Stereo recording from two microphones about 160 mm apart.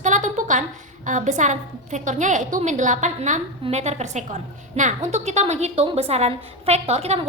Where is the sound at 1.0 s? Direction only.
50° right (ahead or behind).